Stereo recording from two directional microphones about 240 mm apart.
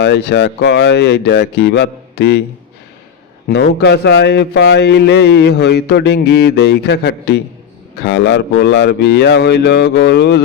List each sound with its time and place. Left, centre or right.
0.0 s speech: left
3.5 s speech: left